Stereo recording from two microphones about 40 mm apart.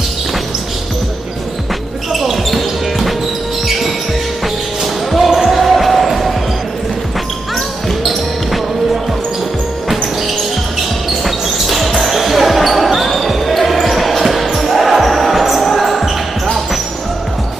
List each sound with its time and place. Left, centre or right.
2.1 s basketball bounce: centre
5.1 s basketball bounce: centre
8.0 s basketball bounce: centre
11.2 s basketball bounce: centre